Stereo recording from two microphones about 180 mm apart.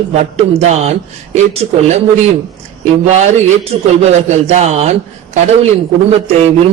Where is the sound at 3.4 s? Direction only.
40° right (ahead or behind).